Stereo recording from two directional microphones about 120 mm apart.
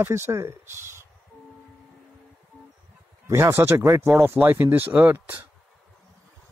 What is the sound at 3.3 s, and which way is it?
Speech, 20° right (ahead or behind).